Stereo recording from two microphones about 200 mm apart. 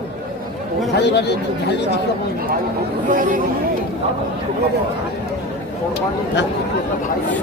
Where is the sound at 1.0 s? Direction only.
55° left (ahead or behind).